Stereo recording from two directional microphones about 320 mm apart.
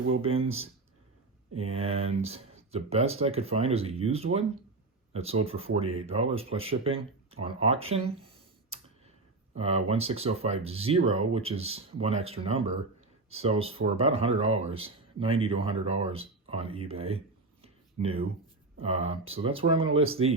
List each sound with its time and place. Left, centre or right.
0.2 s speech: centre
8.7 s tick: centre
9.6 s speech: centre
16.9 s a sound: centre
18.0 s speech: centre